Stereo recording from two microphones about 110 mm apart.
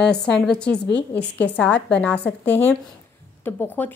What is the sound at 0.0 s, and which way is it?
A woman's voice, 5° left (ahead or behind).